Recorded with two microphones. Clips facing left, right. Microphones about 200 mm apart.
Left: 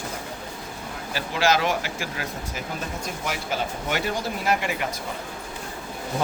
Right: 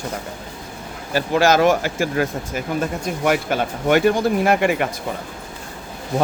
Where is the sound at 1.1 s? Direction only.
45° right (ahead or behind).